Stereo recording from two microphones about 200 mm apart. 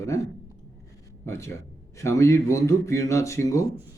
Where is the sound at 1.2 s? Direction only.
15° left (ahead or behind).